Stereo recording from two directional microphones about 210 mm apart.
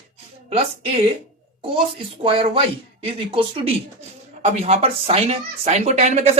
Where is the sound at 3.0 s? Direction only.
25° right (ahead or behind).